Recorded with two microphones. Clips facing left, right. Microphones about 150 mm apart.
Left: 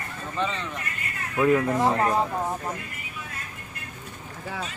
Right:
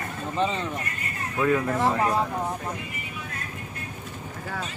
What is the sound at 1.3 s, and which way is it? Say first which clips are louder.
Speech: left 2 dB; 15° left (ahead or behind).